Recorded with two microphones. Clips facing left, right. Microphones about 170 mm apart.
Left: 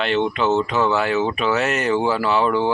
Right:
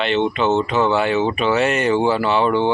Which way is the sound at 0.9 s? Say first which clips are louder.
Right 2 dB; 5° left (ahead or behind).